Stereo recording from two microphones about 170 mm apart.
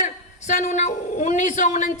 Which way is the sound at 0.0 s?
45° left (ahead or behind).